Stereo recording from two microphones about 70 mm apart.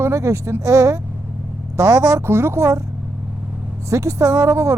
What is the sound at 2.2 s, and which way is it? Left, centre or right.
Speech, right.